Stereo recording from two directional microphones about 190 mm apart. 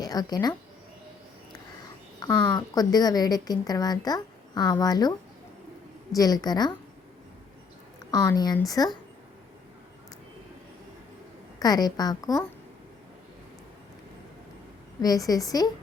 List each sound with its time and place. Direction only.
0.0 s speech: 20° left (ahead or behind)
2.2 s a woman's voice: 20° left (ahead or behind)
6.1 s a woman's voice: 20° left (ahead or behind)
8.1 s a woman's voice: 20° left (ahead or behind)
11.6 s a woman's voice: 20° left (ahead or behind)
15.3 s a woman's voice: 20° left (ahead or behind)